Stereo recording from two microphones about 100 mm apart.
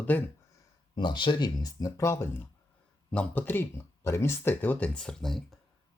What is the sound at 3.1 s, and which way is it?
Speech, 15° left (ahead or behind).